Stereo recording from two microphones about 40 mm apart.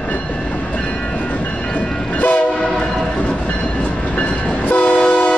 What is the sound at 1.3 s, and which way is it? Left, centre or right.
Train, left.